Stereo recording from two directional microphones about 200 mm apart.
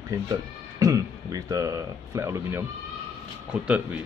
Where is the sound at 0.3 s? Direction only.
15° right (ahead or behind).